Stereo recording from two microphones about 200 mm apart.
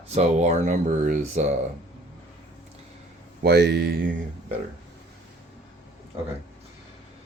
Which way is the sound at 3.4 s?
55° right (ahead or behind).